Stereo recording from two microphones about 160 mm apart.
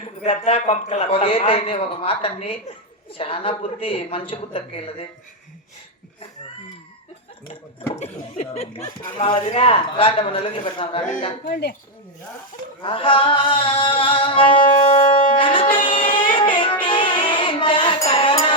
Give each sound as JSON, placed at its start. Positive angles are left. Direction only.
{"t": 0.2, "sound": "music", "side_deg": 40}
{"t": 7.9, "sound": "laughter", "side_deg": 45}
{"t": 9.1, "sound": "music", "side_deg": 35}
{"t": 11.4, "sound": "speech", "side_deg": 70}
{"t": 12.8, "sound": "music", "side_deg": 30}
{"t": 15.7, "sound": "child singing", "side_deg": 30}
{"t": 16.3, "sound": "music", "side_deg": 30}